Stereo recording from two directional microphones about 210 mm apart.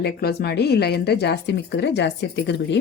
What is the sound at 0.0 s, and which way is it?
A woman's voice, 50° left (ahead or behind).